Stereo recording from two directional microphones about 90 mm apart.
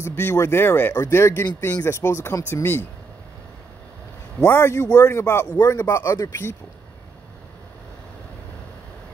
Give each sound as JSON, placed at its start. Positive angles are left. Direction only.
{"t": 0.0, "sound": "speech", "side_deg": 25}
{"t": 4.5, "sound": "speech", "side_deg": 30}